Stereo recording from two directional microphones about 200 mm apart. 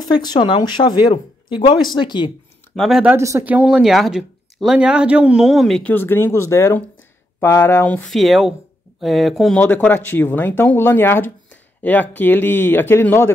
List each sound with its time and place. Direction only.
0.1 s speech: 20° left (ahead or behind)
2.7 s speech: centre (ahead or behind)